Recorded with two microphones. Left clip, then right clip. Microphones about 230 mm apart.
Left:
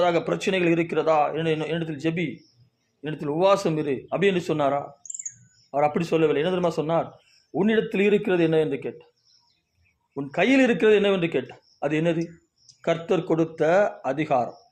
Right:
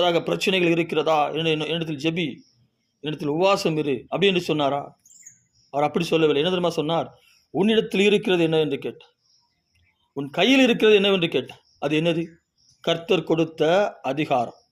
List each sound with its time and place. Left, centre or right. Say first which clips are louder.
0.0 s a man's voice: right 1 dB; right
10.2 s a man's voice: right 2 dB; right